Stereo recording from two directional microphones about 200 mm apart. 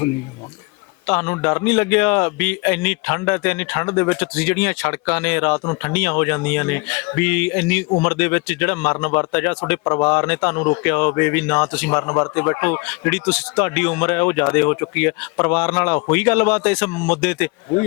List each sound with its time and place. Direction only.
1.0 s speech: 10° left (ahead or behind)